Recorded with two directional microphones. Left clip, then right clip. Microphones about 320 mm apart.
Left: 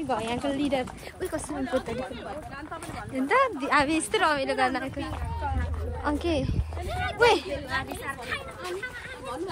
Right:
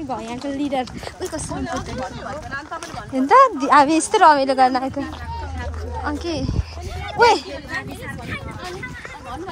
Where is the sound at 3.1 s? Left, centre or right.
Centre.